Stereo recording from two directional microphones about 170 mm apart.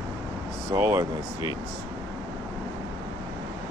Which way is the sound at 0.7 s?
15° right (ahead or behind).